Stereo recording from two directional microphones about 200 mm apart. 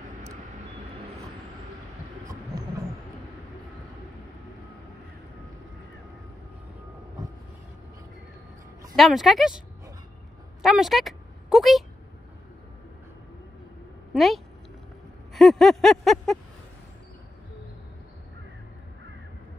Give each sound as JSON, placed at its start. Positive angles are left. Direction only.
{"t": 8.9, "sound": "speech", "side_deg": 0}
{"t": 10.6, "sound": "a woman's voice", "side_deg": 0}
{"t": 14.1, "sound": "speech", "side_deg": 0}
{"t": 15.3, "sound": "a sound", "side_deg": 0}